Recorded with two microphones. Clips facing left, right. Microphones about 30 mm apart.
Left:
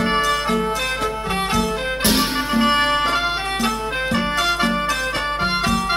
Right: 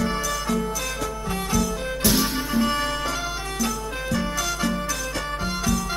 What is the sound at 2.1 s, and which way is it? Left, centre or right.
Music, left.